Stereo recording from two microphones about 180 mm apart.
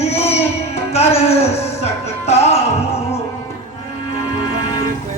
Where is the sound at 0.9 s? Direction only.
35° left (ahead or behind).